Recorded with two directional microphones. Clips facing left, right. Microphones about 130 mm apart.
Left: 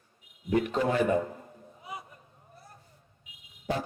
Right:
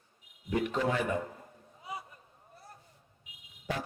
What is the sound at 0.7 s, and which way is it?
Speech, 35° left (ahead or behind).